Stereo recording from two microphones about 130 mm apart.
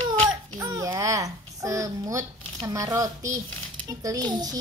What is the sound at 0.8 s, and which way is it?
A woman's voice, 25° right (ahead or behind).